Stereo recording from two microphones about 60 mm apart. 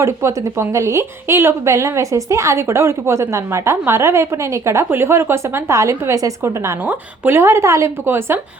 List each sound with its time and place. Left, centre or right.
0.0 s a woman's voice: right
1.7 s a woman's voice: right
6.8 s a woman's voice: right